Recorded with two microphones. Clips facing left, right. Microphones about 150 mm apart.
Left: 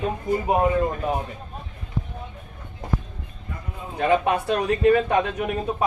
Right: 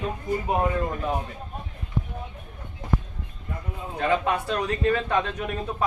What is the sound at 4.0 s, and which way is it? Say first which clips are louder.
Speech: left 4 dB; 20° left (ahead or behind).